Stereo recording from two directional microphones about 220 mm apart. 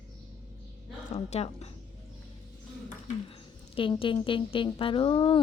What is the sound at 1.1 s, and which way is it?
Speech, 30° left (ahead or behind).